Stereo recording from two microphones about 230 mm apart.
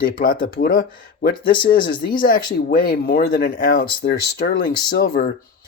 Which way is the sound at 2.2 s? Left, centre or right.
Left.